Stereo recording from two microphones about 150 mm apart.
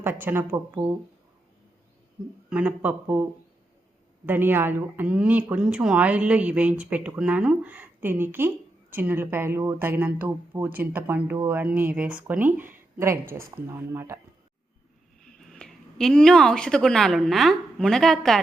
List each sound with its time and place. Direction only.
0.0 s a woman's voice: 15° right (ahead or behind)
2.5 s a woman's voice: 10° right (ahead or behind)
4.3 s a woman's voice: 15° right (ahead or behind)
15.5 s a woman's voice: 5° left (ahead or behind)